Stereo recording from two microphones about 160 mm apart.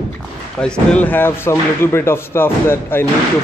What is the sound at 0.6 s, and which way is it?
Speech, 5° left (ahead or behind).